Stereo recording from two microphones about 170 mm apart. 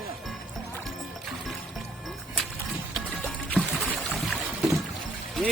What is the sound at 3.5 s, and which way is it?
Rowboat, 5° right (ahead or behind).